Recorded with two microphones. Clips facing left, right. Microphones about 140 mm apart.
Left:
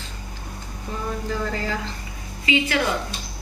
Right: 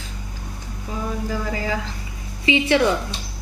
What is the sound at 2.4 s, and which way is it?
Speech, 25° right (ahead or behind).